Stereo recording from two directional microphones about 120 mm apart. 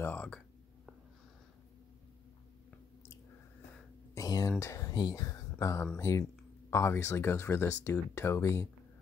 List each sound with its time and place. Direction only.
0.0 s speech: 15° left (ahead or behind)
4.1 s speech: 30° left (ahead or behind)